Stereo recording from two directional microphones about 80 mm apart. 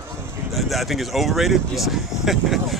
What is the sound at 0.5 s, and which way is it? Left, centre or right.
Speech, centre.